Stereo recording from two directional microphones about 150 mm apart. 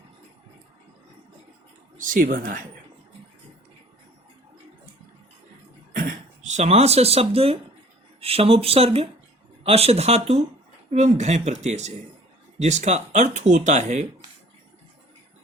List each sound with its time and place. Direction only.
2.0 s speech: 65° right (ahead or behind)
5.9 s a sound: 65° right (ahead or behind); by 7.6 s 40° right (ahead or behind)
8.2 s speech: 40° right (ahead or behind)